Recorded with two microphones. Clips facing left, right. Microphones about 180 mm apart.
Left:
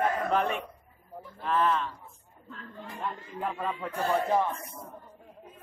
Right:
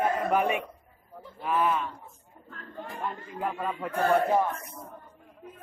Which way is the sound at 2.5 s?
55° right (ahead or behind).